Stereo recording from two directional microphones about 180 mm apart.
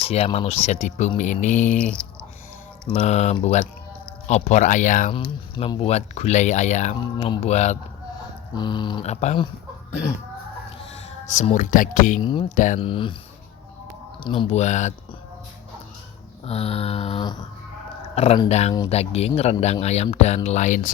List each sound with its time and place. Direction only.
0.0 s speech: 35° left (ahead or behind)
1.8 s speech: 5° left (ahead or behind)
3.0 s speech: 40° left (ahead or behind)
5.5 s speech: 30° left (ahead or behind)
7.0 s speech: 30° left (ahead or behind)
8.5 s speech: 25° left (ahead or behind)
9.0 s speech: 35° left (ahead or behind)
11.3 s speech: 40° left (ahead or behind)
12.2 s speech: 25° left (ahead or behind)
12.5 s speech: 45° left (ahead or behind)
12.8 s speech: 30° left (ahead or behind)
14.3 s speech: 35° left (ahead or behind)
16.5 s speech: 35° left (ahead or behind)